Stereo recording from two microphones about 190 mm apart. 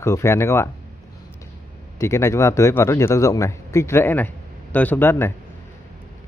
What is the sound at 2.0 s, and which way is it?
Speech, 15° left (ahead or behind).